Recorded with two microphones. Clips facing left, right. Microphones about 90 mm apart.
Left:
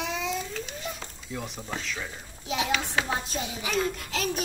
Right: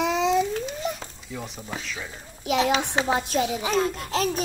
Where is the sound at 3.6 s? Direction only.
40° right (ahead or behind).